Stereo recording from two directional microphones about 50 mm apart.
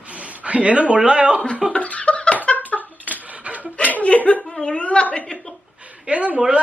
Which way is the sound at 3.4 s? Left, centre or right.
Right.